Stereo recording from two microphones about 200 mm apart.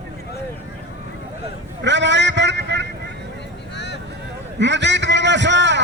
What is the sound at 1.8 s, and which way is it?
Vehicle, 65° right (ahead or behind).